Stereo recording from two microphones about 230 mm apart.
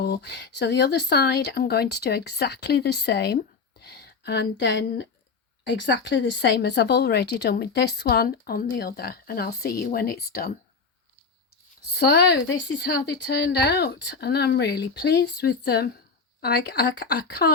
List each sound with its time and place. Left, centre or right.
0.0 s speech: left
11.9 s speech: left